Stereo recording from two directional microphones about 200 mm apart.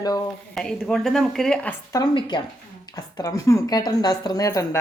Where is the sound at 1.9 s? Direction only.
20° left (ahead or behind).